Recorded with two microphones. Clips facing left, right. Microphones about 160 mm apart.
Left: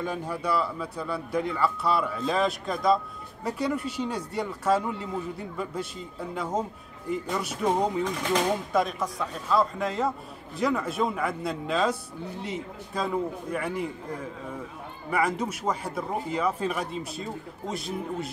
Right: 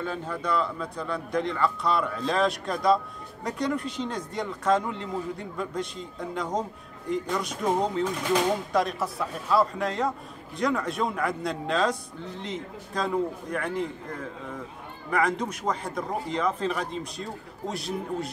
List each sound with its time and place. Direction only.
0.0 s a man's voice: 10° left (ahead or behind)
8.0 s a man's voice: 5° right (ahead or behind)